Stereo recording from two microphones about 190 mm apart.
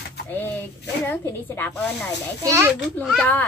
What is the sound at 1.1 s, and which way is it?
Speech, 10° left (ahead or behind).